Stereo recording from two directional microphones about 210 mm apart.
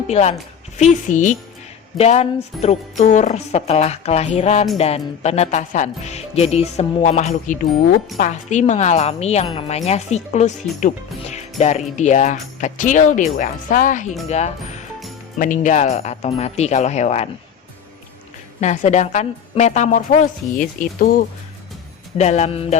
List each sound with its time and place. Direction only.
0.1 s speech: 30° left (ahead or behind)
18.6 s speech: 35° left (ahead or behind)
22.2 s speech: 30° left (ahead or behind)